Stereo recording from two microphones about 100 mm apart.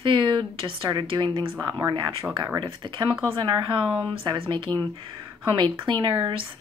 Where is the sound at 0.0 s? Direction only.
55° right (ahead or behind).